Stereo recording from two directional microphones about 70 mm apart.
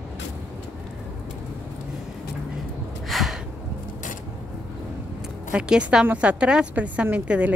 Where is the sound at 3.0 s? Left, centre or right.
Centre.